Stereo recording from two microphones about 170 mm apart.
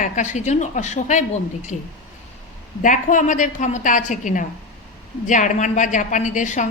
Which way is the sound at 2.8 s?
50° left (ahead or behind).